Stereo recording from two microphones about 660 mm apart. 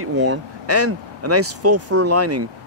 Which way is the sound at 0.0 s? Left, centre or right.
Centre.